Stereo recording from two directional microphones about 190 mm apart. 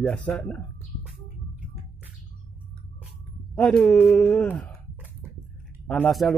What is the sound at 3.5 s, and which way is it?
A man's voice, 5° left (ahead or behind).